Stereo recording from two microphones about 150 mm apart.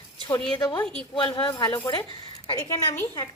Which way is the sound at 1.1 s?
30° left (ahead or behind).